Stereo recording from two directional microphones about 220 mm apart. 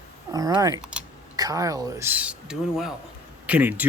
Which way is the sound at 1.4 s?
15° right (ahead or behind).